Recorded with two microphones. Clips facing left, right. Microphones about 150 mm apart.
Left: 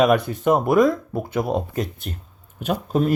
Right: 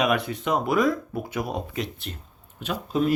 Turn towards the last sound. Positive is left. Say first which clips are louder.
# left 3 dB
turn(degrees=45)  # may be behind; listen again after turning